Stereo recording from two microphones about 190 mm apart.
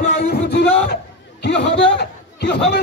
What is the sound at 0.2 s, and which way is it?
Music, 60° left (ahead or behind).